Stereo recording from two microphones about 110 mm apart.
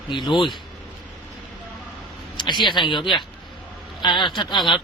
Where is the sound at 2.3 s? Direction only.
45° left (ahead or behind).